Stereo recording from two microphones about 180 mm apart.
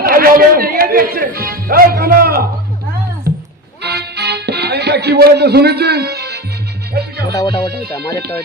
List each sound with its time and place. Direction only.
0.0 s speech: 55° right (ahead or behind)
3.3 s music: 55° right (ahead or behind)
3.8 s music: 65° right (ahead or behind)
7.3 s music: 20° left (ahead or behind)